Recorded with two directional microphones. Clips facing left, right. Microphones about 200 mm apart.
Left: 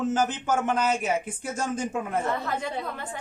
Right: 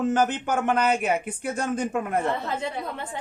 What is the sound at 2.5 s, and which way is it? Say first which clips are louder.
Speech: right 1 dB; 25° right (ahead or behind).